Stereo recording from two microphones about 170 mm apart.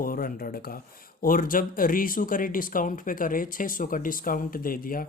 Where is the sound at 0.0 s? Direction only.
55° left (ahead or behind).